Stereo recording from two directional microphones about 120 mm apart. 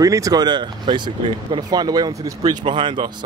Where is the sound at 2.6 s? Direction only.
45° right (ahead or behind).